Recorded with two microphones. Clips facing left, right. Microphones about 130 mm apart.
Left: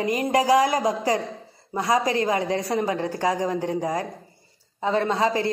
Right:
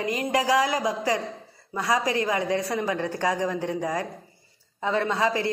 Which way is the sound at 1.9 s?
35° left (ahead or behind).